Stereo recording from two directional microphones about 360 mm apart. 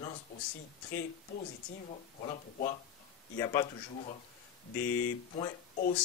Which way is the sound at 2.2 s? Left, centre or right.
Centre.